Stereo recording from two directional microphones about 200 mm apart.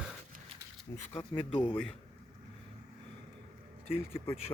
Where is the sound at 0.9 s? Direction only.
10° left (ahead or behind).